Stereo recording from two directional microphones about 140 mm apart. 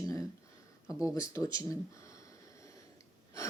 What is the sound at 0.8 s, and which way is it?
Speech, 5° right (ahead or behind).